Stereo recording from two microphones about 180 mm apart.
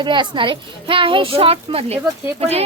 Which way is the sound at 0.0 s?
25° right (ahead or behind).